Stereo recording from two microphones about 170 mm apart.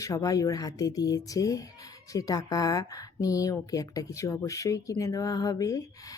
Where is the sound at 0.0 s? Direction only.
20° left (ahead or behind).